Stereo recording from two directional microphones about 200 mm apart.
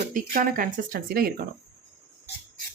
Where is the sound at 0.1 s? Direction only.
45° right (ahead or behind).